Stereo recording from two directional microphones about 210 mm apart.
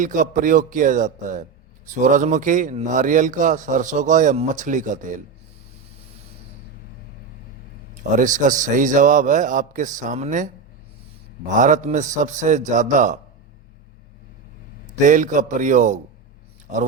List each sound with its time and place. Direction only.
0.0 s a man's voice: 40° right (ahead or behind)
8.1 s a man's voice: 40° right (ahead or behind)
11.5 s a man's voice: 35° right (ahead or behind)
15.0 s a man's voice: 35° right (ahead or behind)